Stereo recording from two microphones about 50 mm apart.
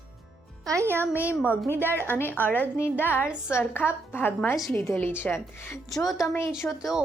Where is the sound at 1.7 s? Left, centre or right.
Left.